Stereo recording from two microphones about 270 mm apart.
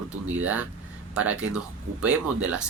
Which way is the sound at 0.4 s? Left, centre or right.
Centre.